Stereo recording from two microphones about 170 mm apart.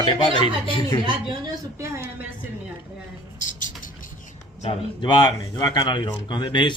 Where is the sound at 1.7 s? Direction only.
15° right (ahead or behind).